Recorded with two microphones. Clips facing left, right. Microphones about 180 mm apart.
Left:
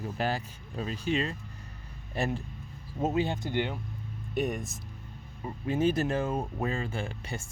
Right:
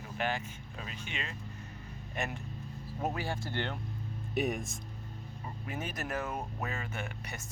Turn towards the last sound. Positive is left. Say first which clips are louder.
# left 5 dB
turn(degrees=30)  # may be behind; listen again after turning